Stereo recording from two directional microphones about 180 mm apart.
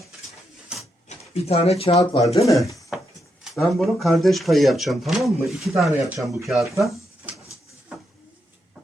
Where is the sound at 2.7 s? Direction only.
15° left (ahead or behind).